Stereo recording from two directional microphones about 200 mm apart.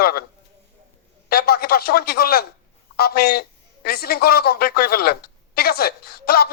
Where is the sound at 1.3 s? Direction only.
50° left (ahead or behind).